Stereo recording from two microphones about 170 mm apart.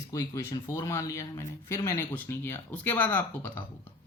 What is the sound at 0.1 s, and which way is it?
Speech, 20° left (ahead or behind).